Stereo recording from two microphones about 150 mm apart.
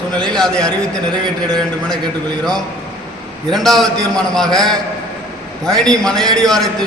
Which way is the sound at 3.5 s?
Centre (ahead or behind).